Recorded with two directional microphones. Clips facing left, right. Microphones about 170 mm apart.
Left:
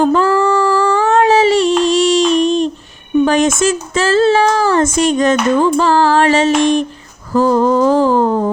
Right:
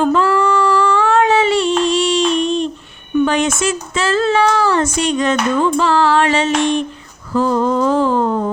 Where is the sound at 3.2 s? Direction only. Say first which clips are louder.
Left 3 dB; 45° left (ahead or behind).